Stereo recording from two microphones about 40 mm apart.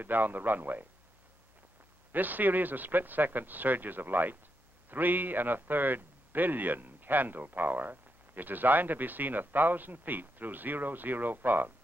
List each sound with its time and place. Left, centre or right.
0.0 s a man's voice: right
2.1 s a man's voice: right